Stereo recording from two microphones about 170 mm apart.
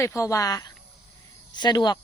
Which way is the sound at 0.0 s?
20° left (ahead or behind).